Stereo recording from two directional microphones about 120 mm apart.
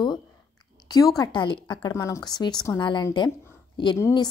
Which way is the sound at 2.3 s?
35° left (ahead or behind).